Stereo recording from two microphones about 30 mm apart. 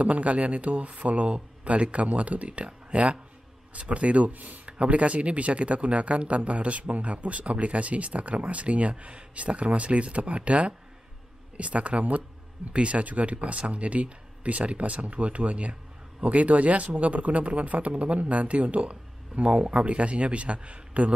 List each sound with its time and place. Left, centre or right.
0.0 s speech: right
4.6 s speech: right
19.6 s speech: right